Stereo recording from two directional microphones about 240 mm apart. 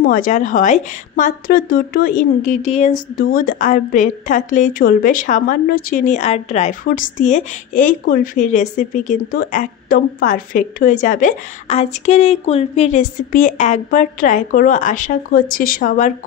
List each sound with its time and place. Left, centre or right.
0.0 s a woman's voice: left